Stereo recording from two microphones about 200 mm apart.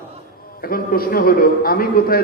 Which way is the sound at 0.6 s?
45° left (ahead or behind).